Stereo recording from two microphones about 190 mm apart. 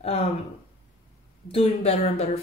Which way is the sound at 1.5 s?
30° left (ahead or behind).